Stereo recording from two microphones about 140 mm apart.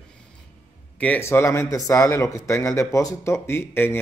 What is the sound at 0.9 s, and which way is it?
Speech, 10° left (ahead or behind).